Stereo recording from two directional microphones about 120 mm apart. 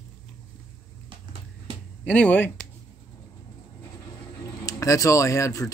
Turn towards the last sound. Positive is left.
turn(degrees=25)  # may be behind; listen again after turning